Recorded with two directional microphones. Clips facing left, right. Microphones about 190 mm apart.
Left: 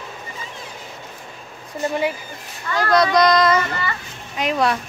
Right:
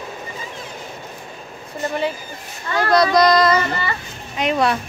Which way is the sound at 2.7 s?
25° right (ahead or behind).